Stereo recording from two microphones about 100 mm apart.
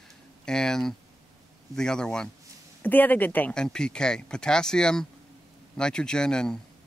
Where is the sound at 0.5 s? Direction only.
5° left (ahead or behind).